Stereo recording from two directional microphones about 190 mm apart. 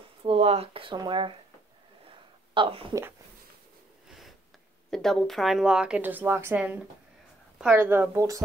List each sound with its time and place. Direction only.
0.2 s speech: 30° right (ahead or behind)
2.5 s speech: 25° right (ahead or behind)
4.9 s a woman's voice: centre (ahead or behind); by 8.4 s 15° right (ahead or behind)